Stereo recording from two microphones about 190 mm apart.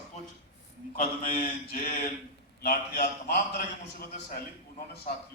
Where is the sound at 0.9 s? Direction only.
50° left (ahead or behind).